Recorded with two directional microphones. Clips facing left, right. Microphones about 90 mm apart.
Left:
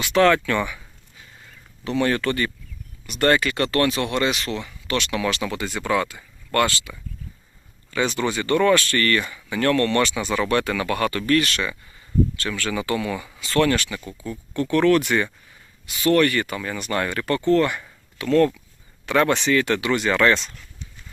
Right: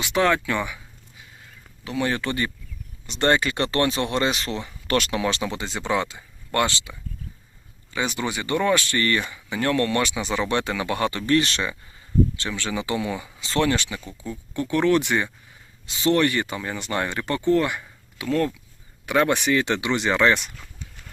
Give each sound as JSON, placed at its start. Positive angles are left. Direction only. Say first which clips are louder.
{"t": 0.0, "sound": "speech", "louder": "left 4 dB", "side_deg": -15}
{"t": 1.8, "sound": "speech", "louder": "left 4 dB", "side_deg": -5}
{"t": 2.0, "sound": "speech", "louder": "left 1 dB", "side_deg": -15}
{"t": 5.2, "sound": "speech", "louder": "left 1 dB", "side_deg": -25}